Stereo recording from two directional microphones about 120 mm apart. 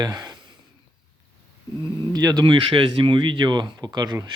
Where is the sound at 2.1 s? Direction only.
35° right (ahead or behind).